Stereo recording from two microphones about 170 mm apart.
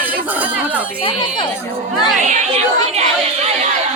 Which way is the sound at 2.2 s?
45° right (ahead or behind).